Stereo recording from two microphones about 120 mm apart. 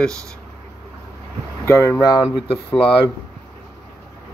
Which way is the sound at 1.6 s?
20° left (ahead or behind).